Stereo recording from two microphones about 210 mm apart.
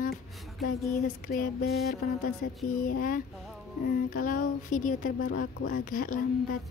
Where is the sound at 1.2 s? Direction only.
45° left (ahead or behind).